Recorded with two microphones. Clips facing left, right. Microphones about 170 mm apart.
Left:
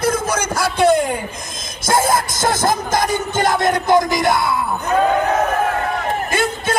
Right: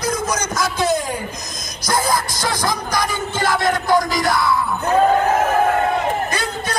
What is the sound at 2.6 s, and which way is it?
Speech, 50° left (ahead or behind).